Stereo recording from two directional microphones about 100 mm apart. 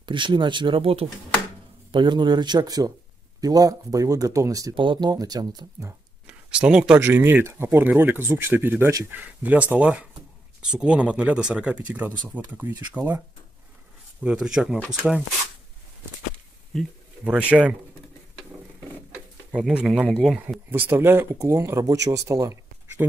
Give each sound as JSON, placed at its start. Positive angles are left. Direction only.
{"t": 0.0, "sound": "speech", "side_deg": -55}
{"t": 1.9, "sound": "speech", "side_deg": -50}
{"t": 4.7, "sound": "speech", "side_deg": -55}
{"t": 6.2, "sound": "speech", "side_deg": -10}
{"t": 7.1, "sound": "speech", "side_deg": -20}
{"t": 14.2, "sound": "speech", "side_deg": -5}
{"t": 17.2, "sound": "speech", "side_deg": -10}
{"t": 19.1, "sound": "a sound", "side_deg": -10}
{"t": 20.7, "sound": "speech", "side_deg": -20}